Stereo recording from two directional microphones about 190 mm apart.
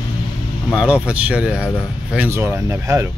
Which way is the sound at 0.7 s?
5° right (ahead or behind).